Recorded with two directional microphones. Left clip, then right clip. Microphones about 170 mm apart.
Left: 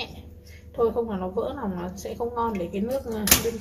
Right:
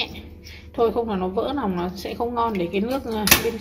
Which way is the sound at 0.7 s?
15° right (ahead or behind).